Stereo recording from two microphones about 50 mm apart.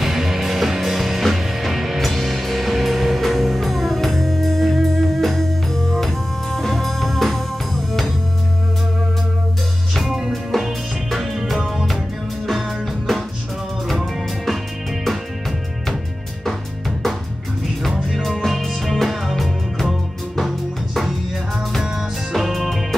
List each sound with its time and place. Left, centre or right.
0.0 s music: centre
10.1 s music: centre
17.8 s music: centre
22.3 s music: centre